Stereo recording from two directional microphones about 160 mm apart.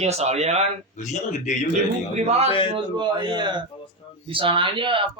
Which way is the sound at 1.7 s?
45° right (ahead or behind).